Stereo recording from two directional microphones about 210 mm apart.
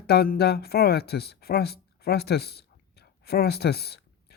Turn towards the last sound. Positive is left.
turn(degrees=50)  # may be behind; listen again after turning